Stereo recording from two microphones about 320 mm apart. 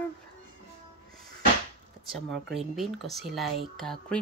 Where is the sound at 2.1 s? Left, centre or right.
Centre.